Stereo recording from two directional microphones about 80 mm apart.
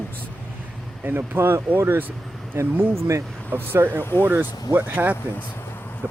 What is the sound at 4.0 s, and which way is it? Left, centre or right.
Speech, left.